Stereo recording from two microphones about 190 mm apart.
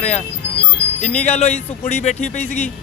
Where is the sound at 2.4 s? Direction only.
10° left (ahead or behind).